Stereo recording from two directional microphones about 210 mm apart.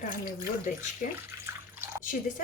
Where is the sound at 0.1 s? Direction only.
40° left (ahead or behind).